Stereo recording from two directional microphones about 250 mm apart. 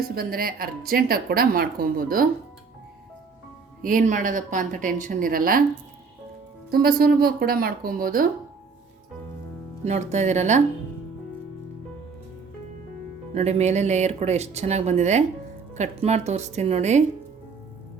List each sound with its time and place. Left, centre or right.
0.2 s a woman's voice: right
3.8 s a woman's voice: right
6.7 s a woman's voice: right
9.8 s speech: right
13.3 s speech: right